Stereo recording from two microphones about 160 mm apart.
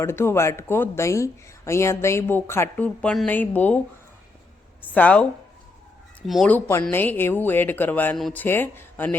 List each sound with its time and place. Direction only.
0.0 s speech: 15° left (ahead or behind)
4.9 s speech: 10° left (ahead or behind)
6.5 s speech: 15° left (ahead or behind)